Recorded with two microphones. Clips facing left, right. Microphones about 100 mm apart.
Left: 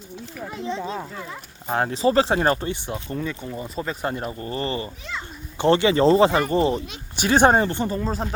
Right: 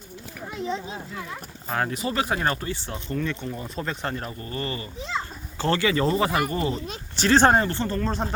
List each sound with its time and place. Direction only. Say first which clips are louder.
1.6 s speech: left 6 dB; 30° left (ahead or behind)
4.4 s speech: left 4 dB; 25° left (ahead or behind)
5.2 s children playing: right 7 dB; 30° right (ahead or behind)
5.5 s speech: left 5 dB; 20° left (ahead or behind)
7.2 s speech: left 1 dB; 10° left (ahead or behind)